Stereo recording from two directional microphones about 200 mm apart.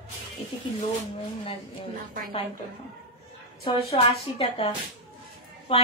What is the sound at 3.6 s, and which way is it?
A woman's voice, 30° left (ahead or behind).